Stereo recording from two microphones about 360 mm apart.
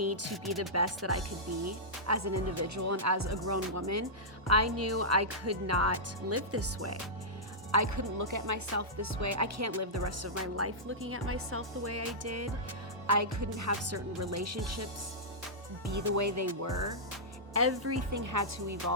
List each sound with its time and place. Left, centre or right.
0.0 s a woman's voice: right
18.2 s speech: right